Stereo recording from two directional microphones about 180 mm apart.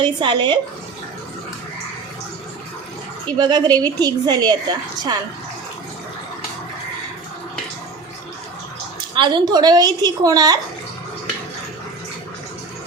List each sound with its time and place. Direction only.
0.0 s a woman's voice: 25° right (ahead or behind)
3.3 s a woman's voice: 25° right (ahead or behind)
9.1 s a woman's voice: 25° right (ahead or behind)